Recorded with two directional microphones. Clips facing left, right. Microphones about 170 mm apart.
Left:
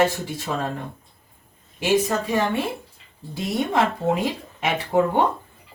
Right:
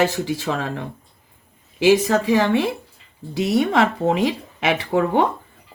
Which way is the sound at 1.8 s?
90° right.